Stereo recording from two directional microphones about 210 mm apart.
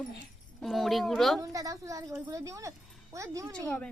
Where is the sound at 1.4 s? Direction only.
15° right (ahead or behind).